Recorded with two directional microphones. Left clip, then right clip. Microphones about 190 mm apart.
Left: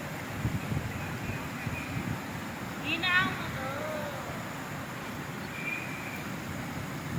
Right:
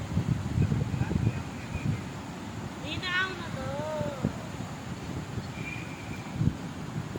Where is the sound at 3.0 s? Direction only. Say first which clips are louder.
Left 3 dB; 65° right (ahead or behind).